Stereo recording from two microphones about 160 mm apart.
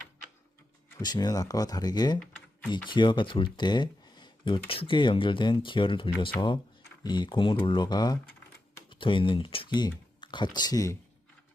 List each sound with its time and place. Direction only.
1.0 s speech: 25° left (ahead or behind)